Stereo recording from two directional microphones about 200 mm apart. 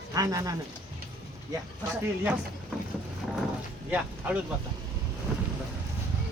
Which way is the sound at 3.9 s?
5° right (ahead or behind).